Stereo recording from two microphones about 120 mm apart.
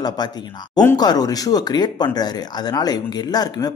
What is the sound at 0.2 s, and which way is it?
A man's voice, 35° left (ahead or behind).